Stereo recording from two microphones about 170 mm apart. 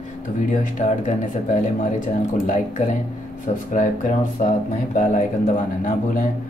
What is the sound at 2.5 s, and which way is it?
Speech, 45° left (ahead or behind).